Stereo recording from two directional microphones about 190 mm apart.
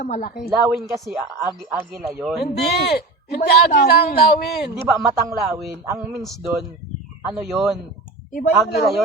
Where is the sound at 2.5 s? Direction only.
55° left (ahead or behind).